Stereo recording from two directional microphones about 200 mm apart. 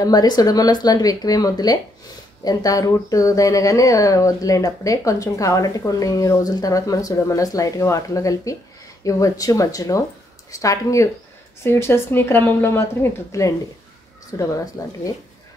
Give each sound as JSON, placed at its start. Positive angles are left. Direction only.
{"t": 0.0, "sound": "speech", "side_deg": 20}